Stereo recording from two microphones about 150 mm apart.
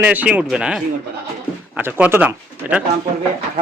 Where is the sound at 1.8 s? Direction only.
15° right (ahead or behind).